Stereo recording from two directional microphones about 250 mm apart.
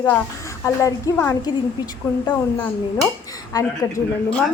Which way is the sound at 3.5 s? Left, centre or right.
Centre.